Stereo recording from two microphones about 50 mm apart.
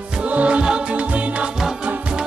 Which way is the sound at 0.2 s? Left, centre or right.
Right.